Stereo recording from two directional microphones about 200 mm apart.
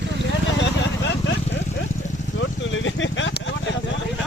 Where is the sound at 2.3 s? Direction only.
70° left (ahead or behind).